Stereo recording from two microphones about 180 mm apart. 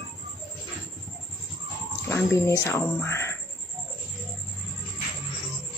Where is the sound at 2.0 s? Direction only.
15° left (ahead or behind).